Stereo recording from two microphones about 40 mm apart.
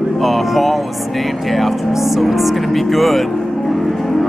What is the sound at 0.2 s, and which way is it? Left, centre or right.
Speech, centre.